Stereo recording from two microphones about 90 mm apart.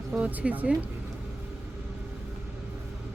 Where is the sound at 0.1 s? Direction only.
15° right (ahead or behind).